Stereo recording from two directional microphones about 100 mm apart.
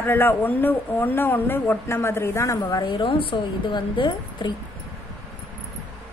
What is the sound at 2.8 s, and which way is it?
A woman's voice, 55° left (ahead or behind).